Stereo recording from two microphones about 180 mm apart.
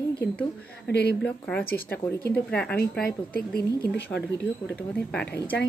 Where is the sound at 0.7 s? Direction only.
65° left (ahead or behind).